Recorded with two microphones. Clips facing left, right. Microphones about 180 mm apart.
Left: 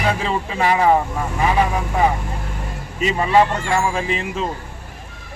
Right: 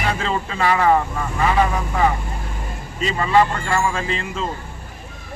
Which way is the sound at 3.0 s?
15° left (ahead or behind).